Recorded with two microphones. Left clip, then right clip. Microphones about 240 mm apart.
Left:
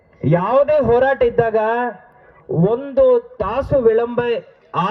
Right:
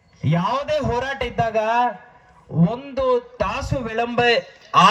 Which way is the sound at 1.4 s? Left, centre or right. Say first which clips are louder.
Left 2 dB; left.